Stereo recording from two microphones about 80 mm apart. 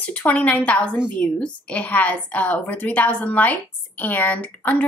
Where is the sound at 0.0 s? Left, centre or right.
Centre.